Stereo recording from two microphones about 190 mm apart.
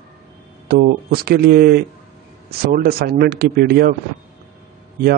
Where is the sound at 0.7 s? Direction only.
55° right (ahead or behind).